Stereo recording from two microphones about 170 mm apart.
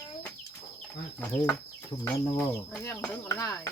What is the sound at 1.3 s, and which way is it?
Speech, 15° left (ahead or behind).